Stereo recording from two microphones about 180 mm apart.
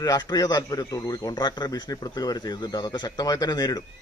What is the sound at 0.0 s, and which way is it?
A man's voice, 20° left (ahead or behind).